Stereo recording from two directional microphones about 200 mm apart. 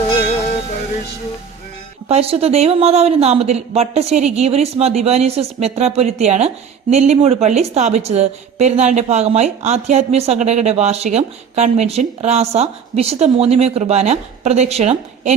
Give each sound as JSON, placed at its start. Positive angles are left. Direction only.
{"t": 2.0, "sound": "a woman's voice", "side_deg": -30}